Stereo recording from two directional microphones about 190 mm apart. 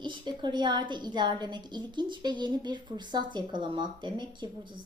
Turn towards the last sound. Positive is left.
turn(degrees=-25)  # may be behind; listen again after turning